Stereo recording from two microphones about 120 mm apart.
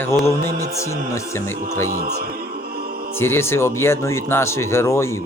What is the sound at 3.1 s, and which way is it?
Speech, 20° left (ahead or behind).